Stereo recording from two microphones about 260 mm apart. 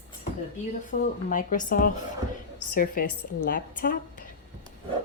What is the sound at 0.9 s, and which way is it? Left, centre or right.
A woman's voice, left.